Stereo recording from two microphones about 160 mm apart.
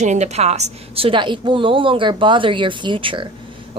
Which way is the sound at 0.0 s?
45° right (ahead or behind).